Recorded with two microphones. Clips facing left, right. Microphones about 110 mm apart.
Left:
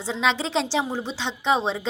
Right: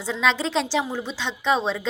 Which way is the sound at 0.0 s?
20° left (ahead or behind).